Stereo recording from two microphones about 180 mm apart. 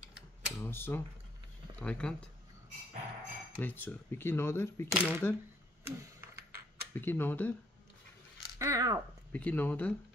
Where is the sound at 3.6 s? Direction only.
10° left (ahead or behind).